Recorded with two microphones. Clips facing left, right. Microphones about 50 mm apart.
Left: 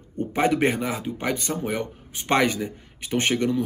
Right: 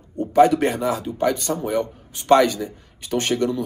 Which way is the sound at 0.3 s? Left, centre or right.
Left.